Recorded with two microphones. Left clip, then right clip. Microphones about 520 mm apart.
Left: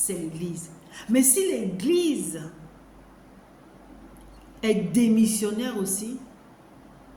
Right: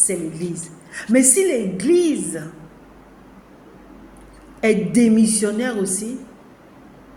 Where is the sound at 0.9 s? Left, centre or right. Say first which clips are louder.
Right 7 dB; left.